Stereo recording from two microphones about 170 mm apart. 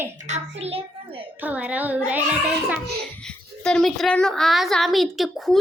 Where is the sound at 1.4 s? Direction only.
10° right (ahead or behind).